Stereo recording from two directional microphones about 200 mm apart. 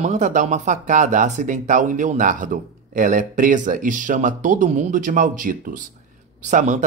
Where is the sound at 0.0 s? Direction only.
35° right (ahead or behind).